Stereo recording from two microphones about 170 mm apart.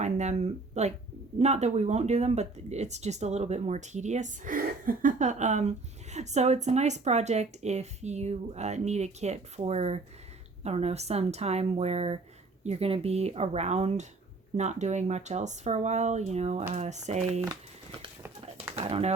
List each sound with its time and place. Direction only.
0.0 s speech: 40° right (ahead or behind)
18.8 s speech: 40° right (ahead or behind)